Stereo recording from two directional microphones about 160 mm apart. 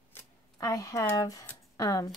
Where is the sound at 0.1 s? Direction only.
20° left (ahead or behind).